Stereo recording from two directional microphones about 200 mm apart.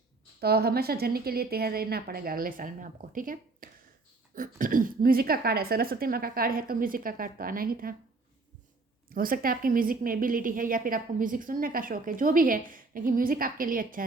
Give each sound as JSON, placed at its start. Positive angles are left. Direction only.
{"t": 0.3, "sound": "a woman's voice", "side_deg": -50}
{"t": 9.0, "sound": "a woman's voice", "side_deg": -45}